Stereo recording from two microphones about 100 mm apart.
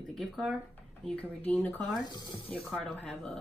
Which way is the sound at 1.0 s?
15° left (ahead or behind).